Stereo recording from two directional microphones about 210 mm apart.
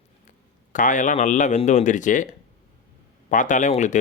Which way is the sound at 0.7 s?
35° left (ahead or behind).